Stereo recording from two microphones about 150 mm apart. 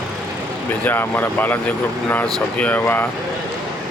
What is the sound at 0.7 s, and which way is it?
Speech, 15° left (ahead or behind).